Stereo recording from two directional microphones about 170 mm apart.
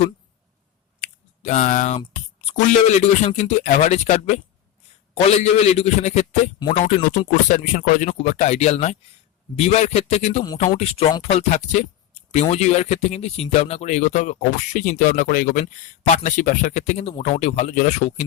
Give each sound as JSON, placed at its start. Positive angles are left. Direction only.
{"t": 1.0, "sound": "a sound", "side_deg": 40}
{"t": 2.5, "sound": "a man's voice", "side_deg": 45}
{"t": 15.6, "sound": "speech", "side_deg": 45}